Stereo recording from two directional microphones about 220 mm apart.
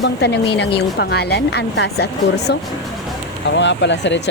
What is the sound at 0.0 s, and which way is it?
Speech, 50° left (ahead or behind).